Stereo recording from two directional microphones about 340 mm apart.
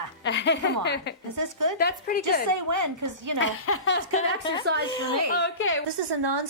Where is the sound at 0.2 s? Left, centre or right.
Left.